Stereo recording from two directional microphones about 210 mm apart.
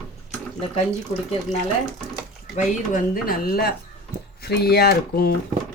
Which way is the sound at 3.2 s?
45° left (ahead or behind).